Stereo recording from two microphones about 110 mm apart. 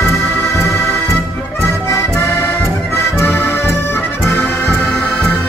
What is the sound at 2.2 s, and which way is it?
Accordion, 25° left (ahead or behind).